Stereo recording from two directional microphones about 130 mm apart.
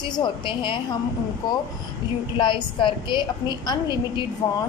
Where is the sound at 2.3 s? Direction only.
40° left (ahead or behind).